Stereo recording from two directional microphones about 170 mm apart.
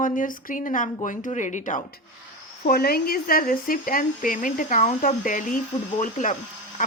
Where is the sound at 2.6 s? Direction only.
60° left (ahead or behind).